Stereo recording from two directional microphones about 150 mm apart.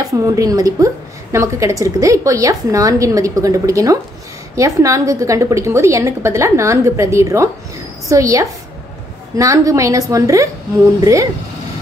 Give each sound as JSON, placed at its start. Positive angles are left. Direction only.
{"t": 0.0, "sound": "a woman's voice", "side_deg": -20}